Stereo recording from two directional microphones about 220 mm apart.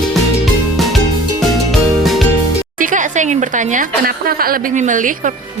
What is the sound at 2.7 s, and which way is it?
A woman's voice, 35° right (ahead or behind).